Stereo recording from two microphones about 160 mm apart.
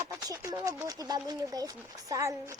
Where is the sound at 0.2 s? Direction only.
20° right (ahead or behind).